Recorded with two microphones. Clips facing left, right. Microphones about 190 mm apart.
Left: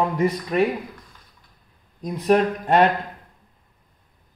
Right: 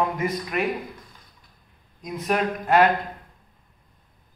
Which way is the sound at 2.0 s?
35° left (ahead or behind).